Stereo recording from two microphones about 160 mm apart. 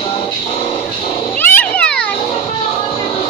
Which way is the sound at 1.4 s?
10° left (ahead or behind).